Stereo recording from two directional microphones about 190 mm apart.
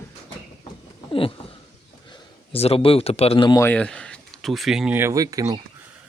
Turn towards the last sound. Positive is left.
turn(degrees=-20)  # may be behind; listen again after turning